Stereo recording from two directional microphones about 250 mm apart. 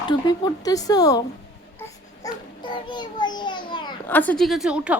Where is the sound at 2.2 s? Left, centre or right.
Centre.